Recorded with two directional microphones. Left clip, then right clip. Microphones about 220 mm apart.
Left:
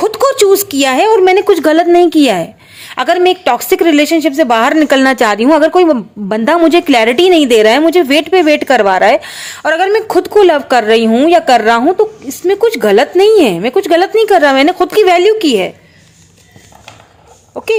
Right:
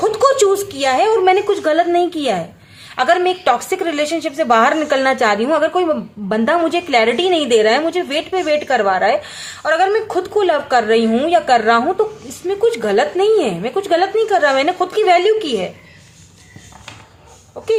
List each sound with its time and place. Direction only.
0.0 s a woman's voice: 40° left (ahead or behind)
17.5 s a woman's voice: 40° left (ahead or behind)